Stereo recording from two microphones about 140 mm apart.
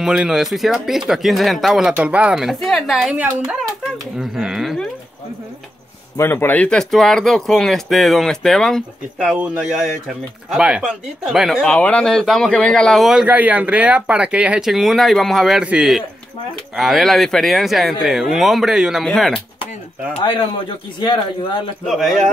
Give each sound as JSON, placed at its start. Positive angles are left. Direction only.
{"t": 0.0, "sound": "speech", "side_deg": -5}
{"t": 6.1, "sound": "speech", "side_deg": 15}
{"t": 20.2, "sound": "a man's voice", "side_deg": 35}
{"t": 21.8, "sound": "speech", "side_deg": 0}